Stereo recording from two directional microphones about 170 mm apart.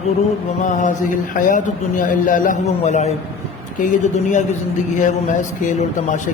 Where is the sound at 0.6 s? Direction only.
50° left (ahead or behind).